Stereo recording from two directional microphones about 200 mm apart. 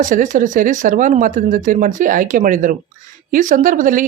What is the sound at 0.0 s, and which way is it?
Speech, 40° right (ahead or behind).